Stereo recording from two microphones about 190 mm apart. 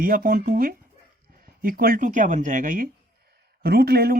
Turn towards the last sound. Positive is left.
turn(degrees=-55)  # may be behind; listen again after turning